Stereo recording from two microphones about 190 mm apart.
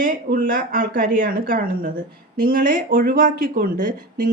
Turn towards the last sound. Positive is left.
turn(degrees=-45)  # may be behind; listen again after turning